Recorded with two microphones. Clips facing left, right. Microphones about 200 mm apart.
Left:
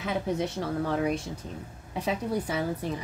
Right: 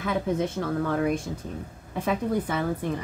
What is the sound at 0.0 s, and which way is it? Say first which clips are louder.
A woman's voice: right 3 dB; 50° right (ahead or behind).